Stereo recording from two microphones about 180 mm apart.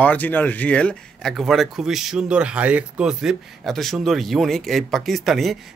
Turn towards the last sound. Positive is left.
turn(degrees=0)  # may be behind; listen again after turning